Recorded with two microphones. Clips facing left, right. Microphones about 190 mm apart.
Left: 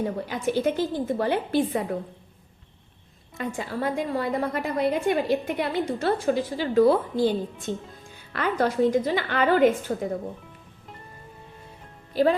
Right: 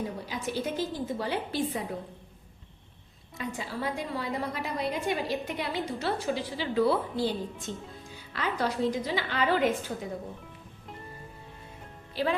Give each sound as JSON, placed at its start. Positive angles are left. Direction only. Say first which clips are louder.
{"t": 0.3, "sound": "a woman's voice", "louder": "left 9 dB", "side_deg": 55}
{"t": 3.3, "sound": "a woman's voice", "louder": "left 5 dB", "side_deg": 55}
{"t": 7.7, "sound": "a woman's voice", "louder": "left 6 dB", "side_deg": 55}
{"t": 12.1, "sound": "a woman's voice", "louder": "left 9 dB", "side_deg": 45}